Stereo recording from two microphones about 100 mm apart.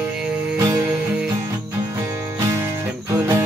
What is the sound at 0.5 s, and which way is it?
Music, 30° right (ahead or behind).